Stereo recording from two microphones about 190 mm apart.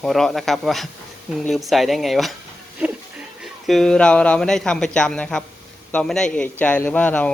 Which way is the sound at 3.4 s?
Centre (ahead or behind).